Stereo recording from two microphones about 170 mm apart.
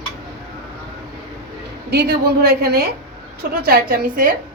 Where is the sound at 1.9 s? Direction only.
70° right (ahead or behind).